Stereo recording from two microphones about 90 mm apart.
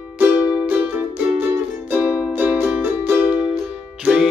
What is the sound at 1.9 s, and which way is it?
Music, 20° right (ahead or behind).